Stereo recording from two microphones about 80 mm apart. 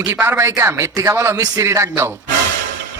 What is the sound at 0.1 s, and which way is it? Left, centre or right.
A man's voice, right.